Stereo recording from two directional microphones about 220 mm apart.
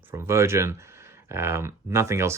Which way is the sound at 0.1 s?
10° right (ahead or behind).